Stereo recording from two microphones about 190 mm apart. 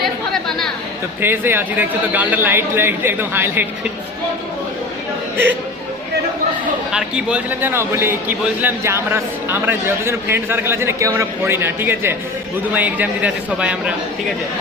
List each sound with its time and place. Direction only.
1.2 s a man's voice: 10° right (ahead or behind)
6.9 s a man's voice: 5° right (ahead or behind)